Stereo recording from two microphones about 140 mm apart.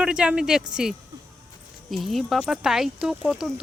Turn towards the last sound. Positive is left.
turn(degrees=-5)  # may be behind; listen again after turning